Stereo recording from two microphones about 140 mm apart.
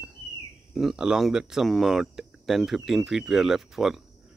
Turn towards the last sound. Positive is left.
turn(degrees=0)  # may be behind; listen again after turning